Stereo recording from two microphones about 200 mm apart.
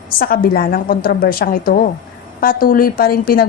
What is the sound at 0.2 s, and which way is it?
Speech, 50° left (ahead or behind).